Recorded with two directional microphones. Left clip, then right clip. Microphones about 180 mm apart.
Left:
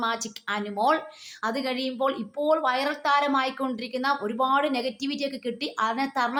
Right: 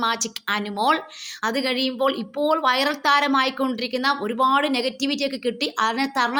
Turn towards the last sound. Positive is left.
turn(degrees=-15)  # may be behind; listen again after turning